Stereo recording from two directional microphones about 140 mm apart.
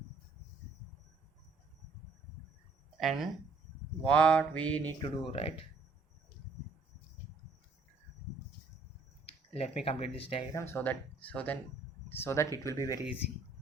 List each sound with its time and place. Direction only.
3.0 s speech: centre (ahead or behind)
4.9 s speech: 40° left (ahead or behind)
9.2 s speech: 45° left (ahead or behind)
10.5 s speech: 20° left (ahead or behind)